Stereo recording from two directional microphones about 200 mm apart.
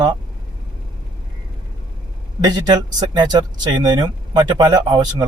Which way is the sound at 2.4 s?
20° right (ahead or behind).